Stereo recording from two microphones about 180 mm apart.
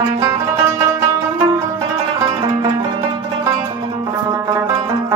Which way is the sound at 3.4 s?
20° right (ahead or behind).